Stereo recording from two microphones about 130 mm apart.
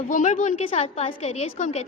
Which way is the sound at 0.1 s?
70° left (ahead or behind).